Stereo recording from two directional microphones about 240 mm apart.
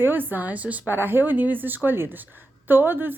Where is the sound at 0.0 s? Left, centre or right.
Centre.